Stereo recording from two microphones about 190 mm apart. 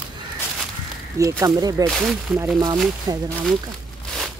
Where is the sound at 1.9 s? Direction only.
Centre (ahead or behind).